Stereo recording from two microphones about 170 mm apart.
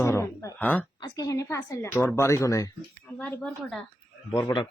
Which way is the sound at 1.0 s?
20° left (ahead or behind).